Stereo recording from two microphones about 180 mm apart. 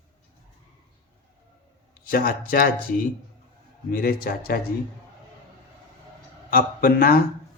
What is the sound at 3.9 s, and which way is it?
Speech, 55° left (ahead or behind).